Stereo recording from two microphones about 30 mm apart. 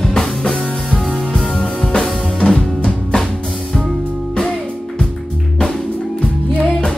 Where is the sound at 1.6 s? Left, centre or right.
Left.